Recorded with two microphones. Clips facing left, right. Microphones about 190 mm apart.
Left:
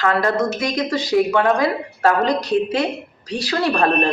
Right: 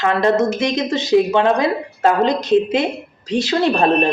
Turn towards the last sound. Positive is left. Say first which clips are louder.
# right 3 dB
turn(degrees=-25)  # may be behind; listen again after turning